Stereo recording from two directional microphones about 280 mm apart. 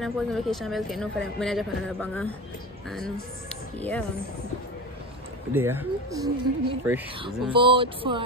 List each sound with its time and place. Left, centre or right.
0.0 s a woman's voice: centre
5.5 s speech: centre